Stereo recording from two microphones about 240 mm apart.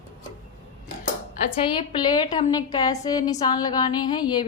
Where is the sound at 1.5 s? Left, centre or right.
Left.